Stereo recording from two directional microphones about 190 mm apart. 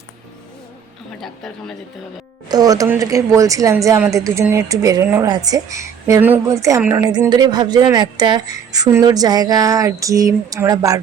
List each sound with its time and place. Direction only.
2.5 s a woman's voice: 20° right (ahead or behind)